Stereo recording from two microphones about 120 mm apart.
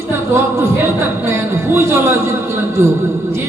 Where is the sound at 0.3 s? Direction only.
20° right (ahead or behind).